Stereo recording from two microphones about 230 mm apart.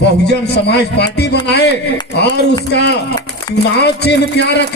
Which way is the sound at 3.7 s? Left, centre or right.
Left.